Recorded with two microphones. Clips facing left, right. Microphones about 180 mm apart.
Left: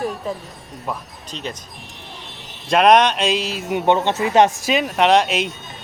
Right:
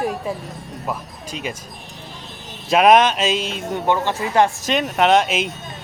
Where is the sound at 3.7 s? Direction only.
20° left (ahead or behind).